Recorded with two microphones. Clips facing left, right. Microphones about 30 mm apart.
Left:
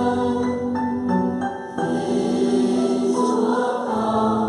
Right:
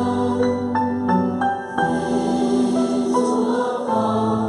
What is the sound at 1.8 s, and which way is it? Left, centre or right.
Music, centre.